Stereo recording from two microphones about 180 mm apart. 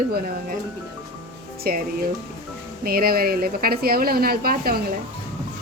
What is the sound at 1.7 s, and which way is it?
Speech, 55° right (ahead or behind).